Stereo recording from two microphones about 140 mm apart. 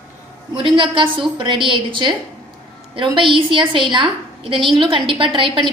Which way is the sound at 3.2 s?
35° right (ahead or behind).